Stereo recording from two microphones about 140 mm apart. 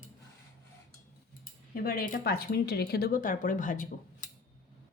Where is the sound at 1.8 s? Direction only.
90° left; by 4.2 s 70° left (ahead or behind).